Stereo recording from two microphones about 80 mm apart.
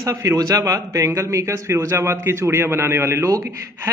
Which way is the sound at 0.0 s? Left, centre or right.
Right.